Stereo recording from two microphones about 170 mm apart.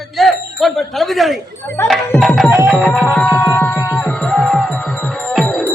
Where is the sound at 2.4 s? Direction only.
15° right (ahead or behind).